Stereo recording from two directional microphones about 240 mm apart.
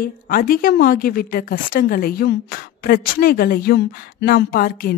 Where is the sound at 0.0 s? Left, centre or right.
Left.